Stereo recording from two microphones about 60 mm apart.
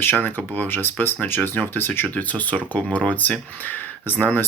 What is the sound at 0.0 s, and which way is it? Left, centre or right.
Speech, left.